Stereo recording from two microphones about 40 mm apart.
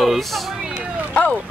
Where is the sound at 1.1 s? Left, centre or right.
Left.